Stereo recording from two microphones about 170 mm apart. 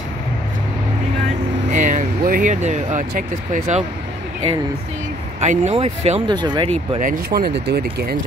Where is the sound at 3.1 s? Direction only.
50° right (ahead or behind).